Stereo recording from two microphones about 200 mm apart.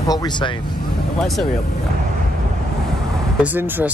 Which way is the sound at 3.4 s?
10° right (ahead or behind).